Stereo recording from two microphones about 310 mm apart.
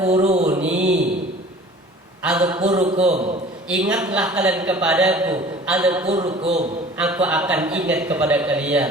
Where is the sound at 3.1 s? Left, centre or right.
Centre.